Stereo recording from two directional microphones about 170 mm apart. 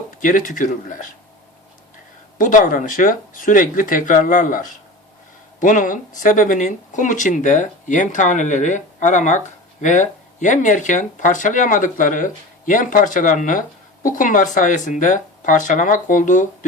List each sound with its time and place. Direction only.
0.2 s speech: 50° left (ahead or behind)
2.4 s speech: 50° left (ahead or behind)